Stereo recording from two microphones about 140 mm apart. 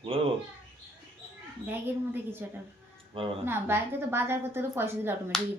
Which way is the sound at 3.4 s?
15° right (ahead or behind).